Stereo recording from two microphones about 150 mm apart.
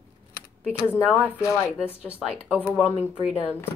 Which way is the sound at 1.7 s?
10° right (ahead or behind).